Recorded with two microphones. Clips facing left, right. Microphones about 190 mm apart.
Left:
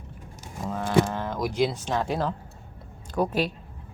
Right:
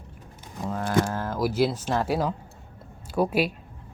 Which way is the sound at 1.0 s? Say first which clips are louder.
Right 2 dB; 5° right (ahead or behind).